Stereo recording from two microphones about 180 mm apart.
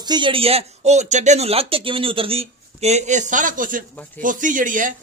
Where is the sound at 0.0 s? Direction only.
25° right (ahead or behind).